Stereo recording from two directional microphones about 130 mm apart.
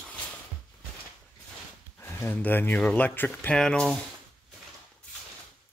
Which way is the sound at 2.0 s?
15° left (ahead or behind).